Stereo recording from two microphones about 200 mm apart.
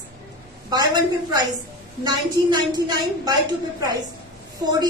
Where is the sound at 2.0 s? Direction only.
20° right (ahead or behind).